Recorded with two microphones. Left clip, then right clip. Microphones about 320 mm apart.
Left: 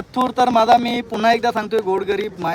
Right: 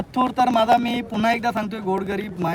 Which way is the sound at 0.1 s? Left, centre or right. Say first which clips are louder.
Left 3 dB; centre.